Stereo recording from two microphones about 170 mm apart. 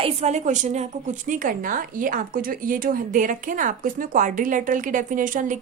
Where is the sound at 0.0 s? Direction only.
40° right (ahead or behind).